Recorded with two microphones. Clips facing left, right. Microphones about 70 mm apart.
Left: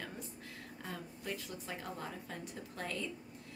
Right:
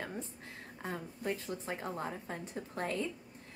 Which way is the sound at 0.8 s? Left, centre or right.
Right.